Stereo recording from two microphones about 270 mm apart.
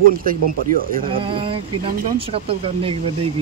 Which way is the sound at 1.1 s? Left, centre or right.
Centre.